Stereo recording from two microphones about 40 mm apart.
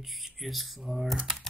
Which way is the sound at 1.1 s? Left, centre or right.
Centre.